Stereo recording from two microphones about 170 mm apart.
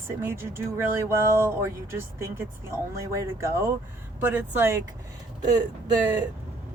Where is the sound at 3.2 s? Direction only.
15° right (ahead or behind).